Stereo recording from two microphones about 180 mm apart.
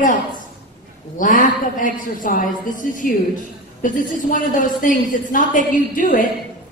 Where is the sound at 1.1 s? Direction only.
45° left (ahead or behind).